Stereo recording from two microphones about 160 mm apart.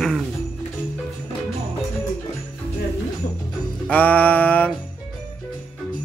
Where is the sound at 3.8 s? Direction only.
10° left (ahead or behind).